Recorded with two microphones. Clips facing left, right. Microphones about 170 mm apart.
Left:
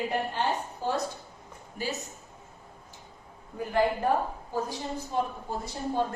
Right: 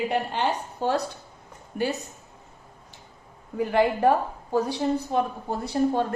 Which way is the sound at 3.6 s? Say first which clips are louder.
Right 5 dB; 75° right (ahead or behind).